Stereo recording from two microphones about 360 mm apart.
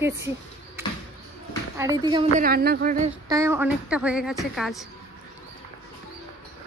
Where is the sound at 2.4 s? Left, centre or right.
Right.